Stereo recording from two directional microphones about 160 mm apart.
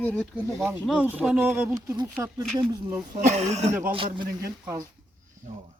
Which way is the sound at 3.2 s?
45° right (ahead or behind).